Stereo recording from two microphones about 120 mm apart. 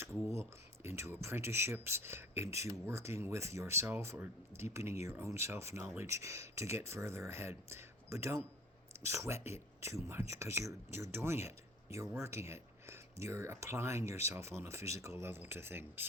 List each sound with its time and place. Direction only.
0.3 s speech: 20° right (ahead or behind)